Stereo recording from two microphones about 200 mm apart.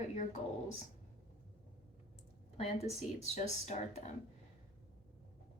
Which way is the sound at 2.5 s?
30° left (ahead or behind).